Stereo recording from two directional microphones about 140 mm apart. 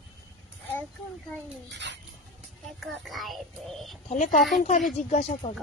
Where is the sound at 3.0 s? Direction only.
Centre (ahead or behind).